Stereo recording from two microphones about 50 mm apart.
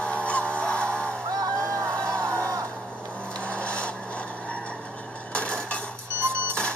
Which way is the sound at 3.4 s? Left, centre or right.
Left.